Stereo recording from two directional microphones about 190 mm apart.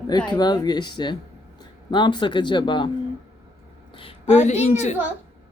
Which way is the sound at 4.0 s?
30° left (ahead or behind).